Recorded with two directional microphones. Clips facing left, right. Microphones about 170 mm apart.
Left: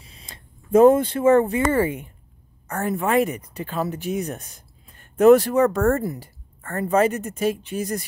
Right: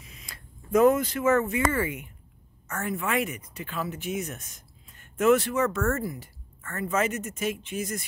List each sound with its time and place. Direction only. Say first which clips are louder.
0.0 s speech: left 2 dB; 30° left (ahead or behind)